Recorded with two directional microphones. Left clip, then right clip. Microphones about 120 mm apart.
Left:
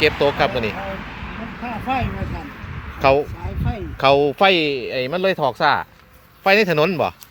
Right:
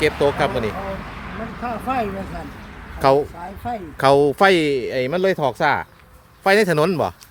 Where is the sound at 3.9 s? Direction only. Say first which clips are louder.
Even; 65° right (ahead or behind).